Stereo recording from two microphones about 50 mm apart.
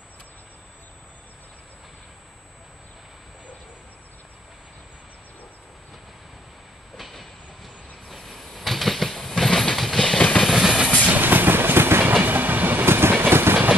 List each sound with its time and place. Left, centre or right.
7.0 s train: centre
11.1 s train: right
12.1 s train: right